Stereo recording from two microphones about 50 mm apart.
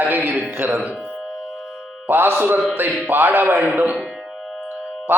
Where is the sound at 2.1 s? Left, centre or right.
Right.